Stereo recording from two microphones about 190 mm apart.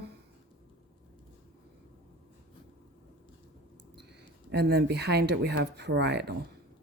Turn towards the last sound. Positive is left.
turn(degrees=-60)  # may be behind; listen again after turning